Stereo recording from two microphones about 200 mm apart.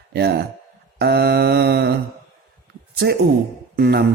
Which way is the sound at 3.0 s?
55° right (ahead or behind).